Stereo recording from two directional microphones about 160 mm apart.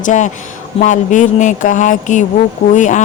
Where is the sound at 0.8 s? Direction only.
50° left (ahead or behind).